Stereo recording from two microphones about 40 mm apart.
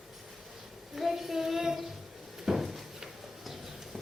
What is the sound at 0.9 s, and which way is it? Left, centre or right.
Child singing, centre.